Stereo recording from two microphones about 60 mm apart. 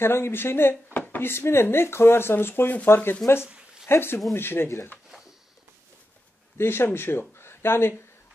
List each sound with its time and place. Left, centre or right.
0.0 s speech: left
6.6 s speech: left